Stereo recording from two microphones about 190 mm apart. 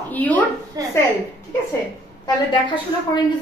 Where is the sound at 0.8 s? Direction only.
20° right (ahead or behind).